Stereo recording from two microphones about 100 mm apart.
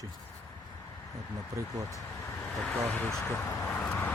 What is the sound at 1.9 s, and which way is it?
Vehicle, 30° left (ahead or behind).